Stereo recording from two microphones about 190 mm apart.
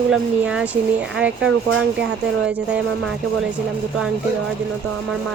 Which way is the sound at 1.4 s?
80° right.